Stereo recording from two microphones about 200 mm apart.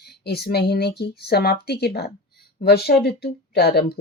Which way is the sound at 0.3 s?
55° left (ahead or behind).